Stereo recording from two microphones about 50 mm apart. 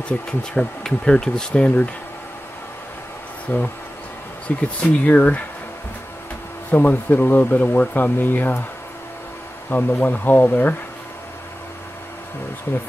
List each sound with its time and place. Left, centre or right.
0.4 s speech: centre
3.4 s speech: left
6.7 s speech: left
9.7 s speech: left